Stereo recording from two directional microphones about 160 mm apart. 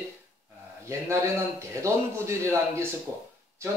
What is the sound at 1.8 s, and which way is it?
Speech, 15° right (ahead or behind).